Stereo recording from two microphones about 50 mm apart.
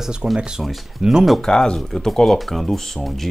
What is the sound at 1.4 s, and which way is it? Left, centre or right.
Speech, centre.